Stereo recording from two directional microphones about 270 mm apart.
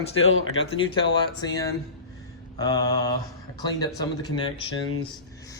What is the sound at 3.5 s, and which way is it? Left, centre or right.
Speech, centre.